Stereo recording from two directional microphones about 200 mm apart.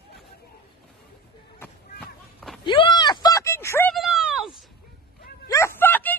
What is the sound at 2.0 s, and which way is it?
Run, centre (ahead or behind).